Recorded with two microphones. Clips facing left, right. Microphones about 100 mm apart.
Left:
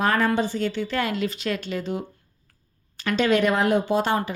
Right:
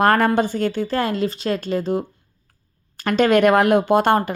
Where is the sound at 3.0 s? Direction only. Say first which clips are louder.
Right 5 dB; 50° right (ahead or behind).